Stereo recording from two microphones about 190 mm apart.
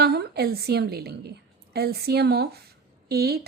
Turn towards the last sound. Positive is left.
turn(degrees=-55)  # may be behind; listen again after turning